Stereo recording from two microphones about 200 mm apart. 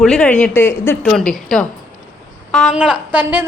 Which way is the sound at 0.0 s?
5° left (ahead or behind).